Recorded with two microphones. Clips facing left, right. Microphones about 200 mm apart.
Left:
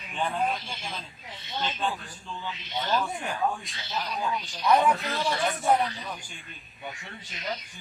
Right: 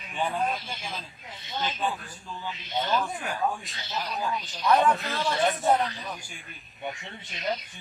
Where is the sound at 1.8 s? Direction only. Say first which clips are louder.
Even; 5° right (ahead or behind).